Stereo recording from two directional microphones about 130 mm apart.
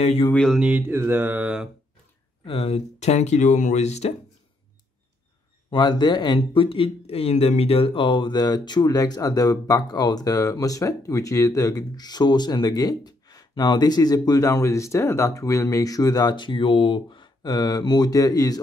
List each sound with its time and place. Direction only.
0.3 s a sound: 5° left (ahead or behind)
0.6 s mantra: 10° right (ahead or behind)
2.4 s speech: 50° left (ahead or behind)
5.7 s speech: 35° left (ahead or behind)